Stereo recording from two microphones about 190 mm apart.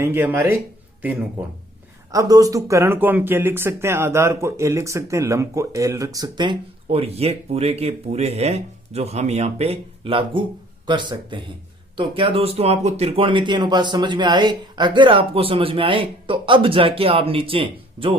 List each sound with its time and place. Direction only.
0.0 s speech: 10° right (ahead or behind); by 18.1 s 30° right (ahead or behind)